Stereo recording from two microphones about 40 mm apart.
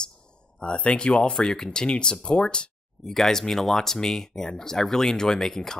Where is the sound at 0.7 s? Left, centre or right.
Left.